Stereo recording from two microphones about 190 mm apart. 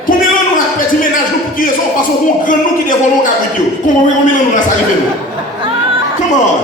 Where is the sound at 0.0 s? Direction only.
45° left (ahead or behind).